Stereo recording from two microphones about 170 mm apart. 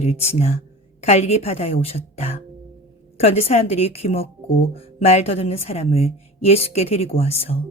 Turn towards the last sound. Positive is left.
turn(degrees=35)  # may be behind; listen again after turning